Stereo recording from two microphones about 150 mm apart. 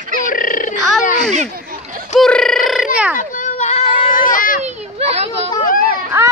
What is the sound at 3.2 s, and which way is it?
Children playing, 60° left (ahead or behind).